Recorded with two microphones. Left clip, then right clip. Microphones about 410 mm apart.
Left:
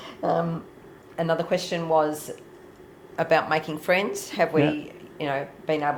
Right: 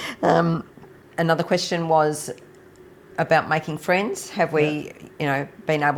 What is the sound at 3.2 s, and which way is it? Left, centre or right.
Speech, right.